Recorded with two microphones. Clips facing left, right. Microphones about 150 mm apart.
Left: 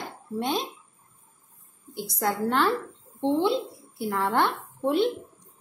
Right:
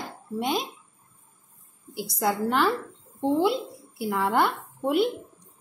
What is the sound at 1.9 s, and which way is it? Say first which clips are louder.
A woman's voice: right 1 dB; 5° right (ahead or behind).